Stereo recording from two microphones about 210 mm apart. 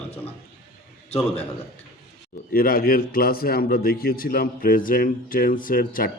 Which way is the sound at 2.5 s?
45° left (ahead or behind).